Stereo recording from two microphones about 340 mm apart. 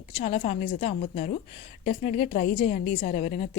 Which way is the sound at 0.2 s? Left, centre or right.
Centre.